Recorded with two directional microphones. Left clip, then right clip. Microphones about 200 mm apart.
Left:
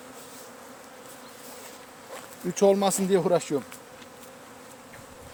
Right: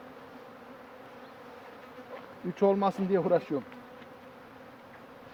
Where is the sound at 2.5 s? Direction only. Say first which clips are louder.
Left 5 dB; 65° left (ahead or behind).